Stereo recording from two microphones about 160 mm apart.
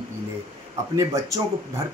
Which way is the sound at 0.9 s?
20° right (ahead or behind).